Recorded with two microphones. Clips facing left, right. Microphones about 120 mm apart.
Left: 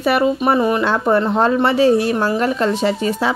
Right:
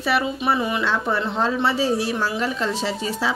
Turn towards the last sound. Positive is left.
turn(degrees=55)  # may be behind; listen again after turning